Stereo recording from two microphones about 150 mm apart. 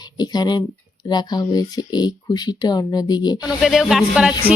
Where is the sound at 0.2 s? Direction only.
25° left (ahead or behind).